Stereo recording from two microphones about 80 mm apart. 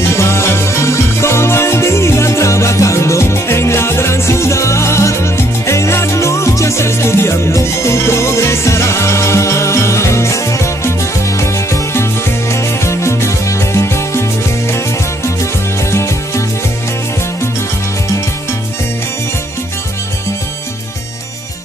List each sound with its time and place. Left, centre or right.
0.1 s music: left
15.8 s music: left